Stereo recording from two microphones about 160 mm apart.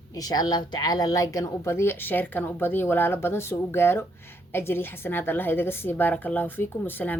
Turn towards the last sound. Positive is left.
turn(degrees=10)  # may be behind; listen again after turning